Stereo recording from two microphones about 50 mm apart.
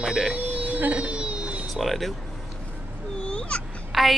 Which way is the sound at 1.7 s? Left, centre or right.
Centre.